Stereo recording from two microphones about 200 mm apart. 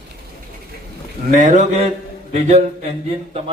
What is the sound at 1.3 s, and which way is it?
Speech, 40° right (ahead or behind).